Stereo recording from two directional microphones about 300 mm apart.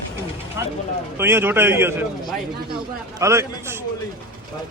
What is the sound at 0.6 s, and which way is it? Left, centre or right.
A man's voice, centre.